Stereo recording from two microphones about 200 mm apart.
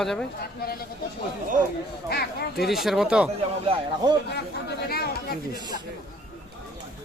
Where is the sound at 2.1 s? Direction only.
50° left (ahead or behind).